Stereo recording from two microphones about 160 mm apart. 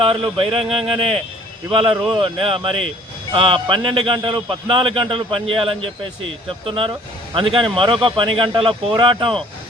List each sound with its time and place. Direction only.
0.0 s a man's voice: 30° right (ahead or behind)